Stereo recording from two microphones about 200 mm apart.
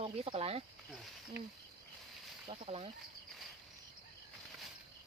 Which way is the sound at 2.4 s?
30° right (ahead or behind).